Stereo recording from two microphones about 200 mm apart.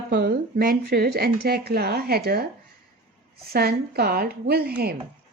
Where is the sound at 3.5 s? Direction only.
50° right (ahead or behind).